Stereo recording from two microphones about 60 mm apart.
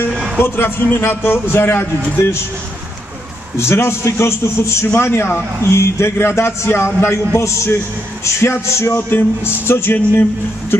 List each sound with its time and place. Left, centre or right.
0.4 s a man's voice: left
3.5 s a man's voice: left